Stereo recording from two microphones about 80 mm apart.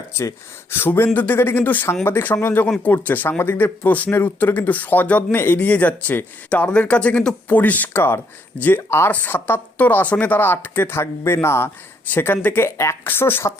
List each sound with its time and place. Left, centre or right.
0.2 s speech: left
13.1 s speech: left